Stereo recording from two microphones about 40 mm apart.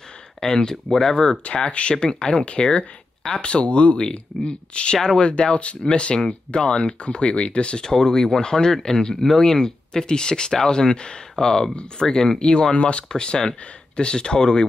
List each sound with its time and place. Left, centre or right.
0.4 s speech: centre
0.8 s speech: centre
1.1 s speech: centre
1.4 s speech: left
4.9 s speech: centre
5.3 s speech: left